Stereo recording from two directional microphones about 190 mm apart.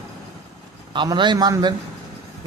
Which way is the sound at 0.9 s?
25° right (ahead or behind).